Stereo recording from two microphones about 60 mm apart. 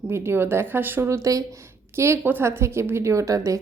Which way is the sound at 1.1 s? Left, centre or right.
Right.